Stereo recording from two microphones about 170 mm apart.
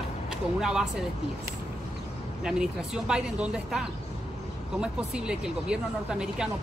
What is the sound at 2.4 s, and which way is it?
Speech, 5° right (ahead or behind).